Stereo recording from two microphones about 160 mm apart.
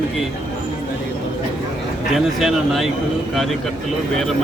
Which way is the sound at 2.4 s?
Centre (ahead or behind).